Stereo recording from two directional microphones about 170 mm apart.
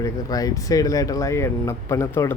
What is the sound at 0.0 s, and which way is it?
Speech, 20° left (ahead or behind).